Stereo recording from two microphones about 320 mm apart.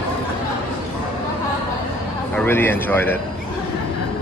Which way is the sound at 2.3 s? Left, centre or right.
Centre.